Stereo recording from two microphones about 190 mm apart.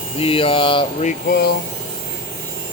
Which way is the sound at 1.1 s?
55° left (ahead or behind).